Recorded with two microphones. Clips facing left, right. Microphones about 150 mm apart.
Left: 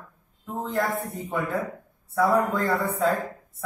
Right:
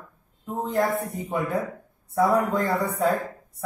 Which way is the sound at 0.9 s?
20° right (ahead or behind).